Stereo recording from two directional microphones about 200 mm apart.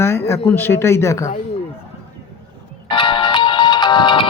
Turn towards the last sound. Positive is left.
turn(degrees=25)  # may be behind; listen again after turning